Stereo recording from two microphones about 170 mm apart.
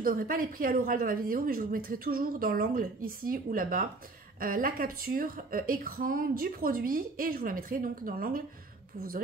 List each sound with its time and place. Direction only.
0.0 s speech: 55° right (ahead or behind)